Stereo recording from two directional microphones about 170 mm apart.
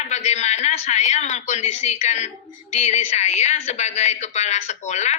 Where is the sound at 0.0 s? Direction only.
40° left (ahead or behind).